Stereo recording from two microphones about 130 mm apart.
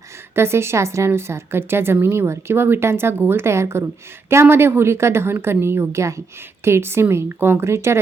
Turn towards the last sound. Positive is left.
turn(degrees=-20)  # may be behind; listen again after turning